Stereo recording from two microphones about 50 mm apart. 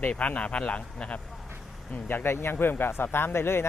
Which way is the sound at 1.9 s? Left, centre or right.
Left.